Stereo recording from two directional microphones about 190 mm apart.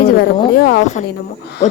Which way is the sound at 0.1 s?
60° left (ahead or behind).